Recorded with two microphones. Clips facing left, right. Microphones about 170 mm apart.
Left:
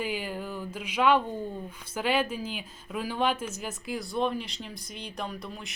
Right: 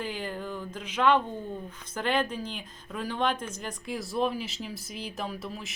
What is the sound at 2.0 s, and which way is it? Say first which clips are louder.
Speech: left 1 dB; 5° left (ahead or behind).